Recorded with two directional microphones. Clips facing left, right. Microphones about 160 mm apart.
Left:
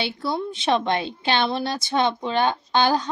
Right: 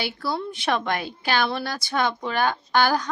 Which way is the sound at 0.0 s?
25° left (ahead or behind).